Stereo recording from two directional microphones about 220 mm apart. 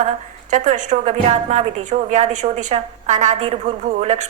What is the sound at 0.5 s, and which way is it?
A woman's voice, 35° right (ahead or behind).